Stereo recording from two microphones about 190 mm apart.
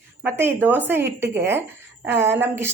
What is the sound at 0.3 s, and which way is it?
Speech, 10° right (ahead or behind).